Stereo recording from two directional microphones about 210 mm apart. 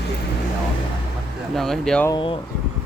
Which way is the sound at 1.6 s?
Centre (ahead or behind).